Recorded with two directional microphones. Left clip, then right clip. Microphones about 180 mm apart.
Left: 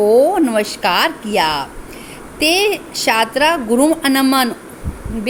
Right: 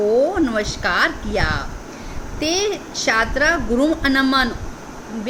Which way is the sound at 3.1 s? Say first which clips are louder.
Left 3 dB; 45° left (ahead or behind).